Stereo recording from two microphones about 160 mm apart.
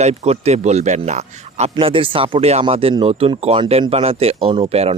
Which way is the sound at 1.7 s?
35° right (ahead or behind).